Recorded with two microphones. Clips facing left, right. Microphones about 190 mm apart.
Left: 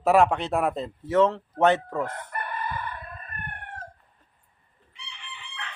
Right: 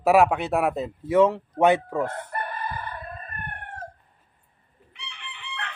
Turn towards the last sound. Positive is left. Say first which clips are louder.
# right 4 dB
turn(degrees=-60)  # may be behind; listen again after turning